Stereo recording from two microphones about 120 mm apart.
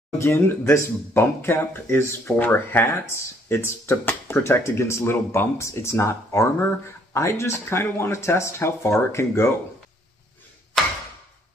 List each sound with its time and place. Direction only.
0.2 s speech: 20° left (ahead or behind)